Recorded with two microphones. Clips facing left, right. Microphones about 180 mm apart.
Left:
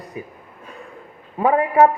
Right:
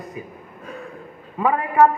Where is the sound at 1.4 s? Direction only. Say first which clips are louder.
Left 2 dB; 35° left (ahead or behind).